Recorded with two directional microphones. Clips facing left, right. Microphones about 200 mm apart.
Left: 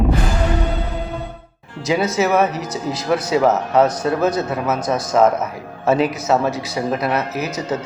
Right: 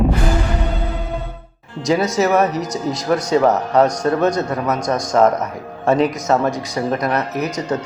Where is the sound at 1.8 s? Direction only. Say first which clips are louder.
Right 1 dB; centre (ahead or behind).